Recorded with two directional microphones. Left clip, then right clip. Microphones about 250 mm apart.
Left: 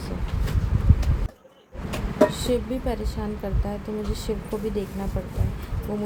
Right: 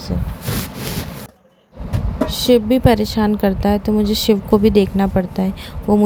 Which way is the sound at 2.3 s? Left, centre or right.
Right.